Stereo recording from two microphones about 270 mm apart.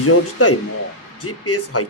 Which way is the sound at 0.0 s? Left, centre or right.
Left.